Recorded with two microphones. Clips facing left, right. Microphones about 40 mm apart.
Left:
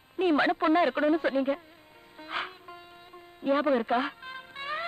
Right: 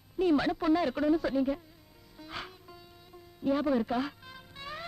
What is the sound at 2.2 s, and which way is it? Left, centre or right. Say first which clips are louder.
Music: left 7 dB; left.